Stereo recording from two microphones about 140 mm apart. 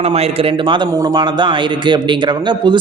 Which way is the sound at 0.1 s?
45° right (ahead or behind).